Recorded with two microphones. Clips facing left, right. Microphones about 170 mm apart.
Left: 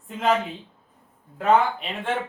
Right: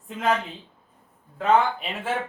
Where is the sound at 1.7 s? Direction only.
5° right (ahead or behind).